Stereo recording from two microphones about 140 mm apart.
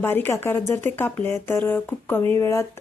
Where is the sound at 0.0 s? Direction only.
15° left (ahead or behind).